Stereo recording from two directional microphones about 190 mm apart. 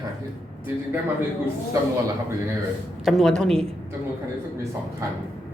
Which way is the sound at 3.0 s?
Centre (ahead or behind).